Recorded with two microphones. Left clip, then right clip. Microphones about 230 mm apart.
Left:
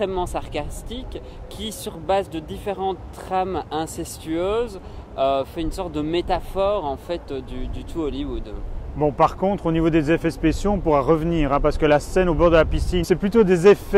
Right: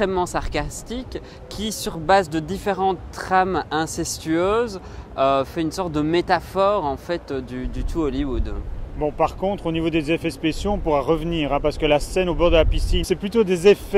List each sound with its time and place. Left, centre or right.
0.0 s speech: right
2.0 s speech: right
9.0 s speech: left